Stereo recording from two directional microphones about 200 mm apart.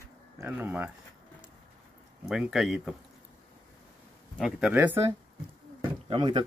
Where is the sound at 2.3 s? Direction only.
5° right (ahead or behind).